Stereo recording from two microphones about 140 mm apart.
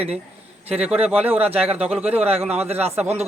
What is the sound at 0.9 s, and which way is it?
Speech, 45° right (ahead or behind).